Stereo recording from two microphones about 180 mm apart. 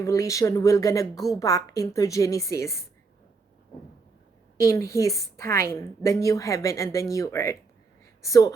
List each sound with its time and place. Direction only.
0.0 s a woman's voice: 15° left (ahead or behind)
4.6 s a woman's voice: 15° left (ahead or behind)